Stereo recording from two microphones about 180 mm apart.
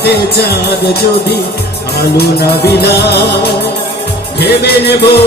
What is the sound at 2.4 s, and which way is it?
Music, 65° left (ahead or behind).